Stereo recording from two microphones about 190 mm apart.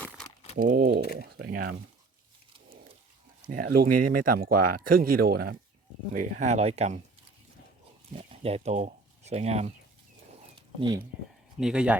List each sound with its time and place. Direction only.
0.6 s speech: 50° right (ahead or behind)
3.4 s speech: 45° right (ahead or behind)
6.1 s speech: 40° right (ahead or behind)
8.1 s speech: 30° right (ahead or behind)
10.5 s a sound: 25° right (ahead or behind)
11.6 s speech: 5° right (ahead or behind)